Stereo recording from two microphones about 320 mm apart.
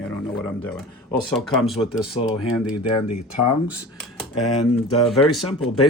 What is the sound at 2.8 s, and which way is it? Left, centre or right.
Speech, left.